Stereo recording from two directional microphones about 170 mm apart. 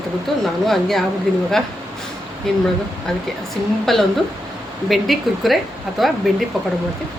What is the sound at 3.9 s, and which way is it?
Speech, centre (ahead or behind).